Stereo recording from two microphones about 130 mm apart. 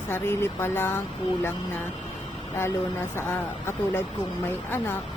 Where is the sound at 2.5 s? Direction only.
20° left (ahead or behind).